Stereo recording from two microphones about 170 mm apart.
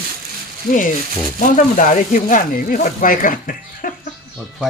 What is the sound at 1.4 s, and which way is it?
Speech, 50° left (ahead or behind).